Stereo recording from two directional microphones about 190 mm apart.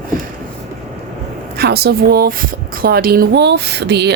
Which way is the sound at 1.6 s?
55° right (ahead or behind).